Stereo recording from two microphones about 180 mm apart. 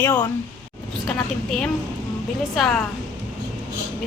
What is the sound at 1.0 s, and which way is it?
Speech, centre (ahead or behind).